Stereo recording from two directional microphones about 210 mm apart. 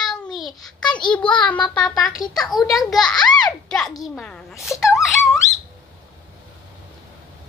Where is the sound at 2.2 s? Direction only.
20° left (ahead or behind).